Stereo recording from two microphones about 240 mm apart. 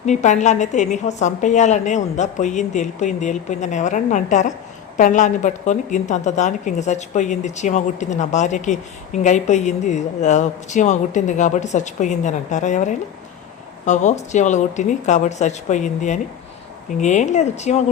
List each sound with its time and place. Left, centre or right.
0.0 s a woman's voice: left